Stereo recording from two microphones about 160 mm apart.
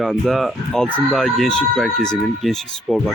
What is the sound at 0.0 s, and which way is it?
A man's voice, centre (ahead or behind).